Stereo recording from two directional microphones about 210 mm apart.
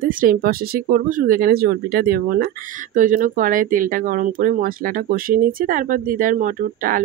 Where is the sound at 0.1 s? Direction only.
40° right (ahead or behind).